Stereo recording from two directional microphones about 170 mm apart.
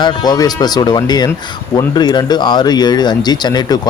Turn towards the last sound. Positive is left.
turn(degrees=25)  # may be behind; listen again after turning